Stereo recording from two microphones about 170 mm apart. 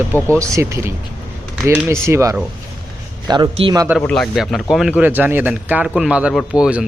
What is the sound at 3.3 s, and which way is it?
Speech, 30° right (ahead or behind).